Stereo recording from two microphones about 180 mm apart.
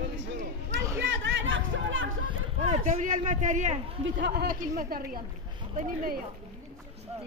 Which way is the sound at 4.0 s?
70° right (ahead or behind).